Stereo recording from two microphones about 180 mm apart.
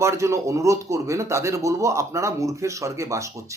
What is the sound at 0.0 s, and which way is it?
A man's voice, 15° right (ahead or behind).